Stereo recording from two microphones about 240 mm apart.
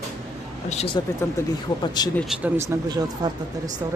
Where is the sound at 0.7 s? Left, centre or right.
Left.